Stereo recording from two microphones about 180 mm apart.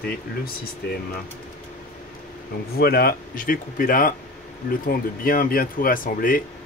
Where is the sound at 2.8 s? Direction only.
60° left (ahead or behind).